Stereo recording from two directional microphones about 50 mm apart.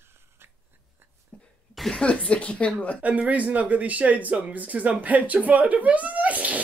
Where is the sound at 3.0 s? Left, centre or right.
Right.